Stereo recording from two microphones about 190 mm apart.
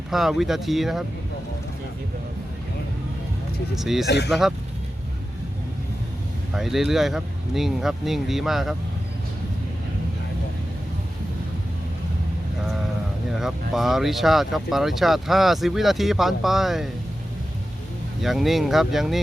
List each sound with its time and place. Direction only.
0.1 s speech: centre (ahead or behind)
3.8 s speech: centre (ahead or behind)
4.0 s speech: 60° left (ahead or behind)
4.3 s speech: centre (ahead or behind)
6.5 s speech: centre (ahead or behind)
13.3 s speech: centre (ahead or behind)
18.2 s speech: centre (ahead or behind)